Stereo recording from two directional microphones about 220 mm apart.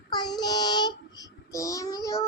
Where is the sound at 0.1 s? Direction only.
20° left (ahead or behind).